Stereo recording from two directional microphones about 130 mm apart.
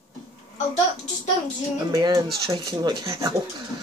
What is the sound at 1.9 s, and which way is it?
Speech, 35° right (ahead or behind).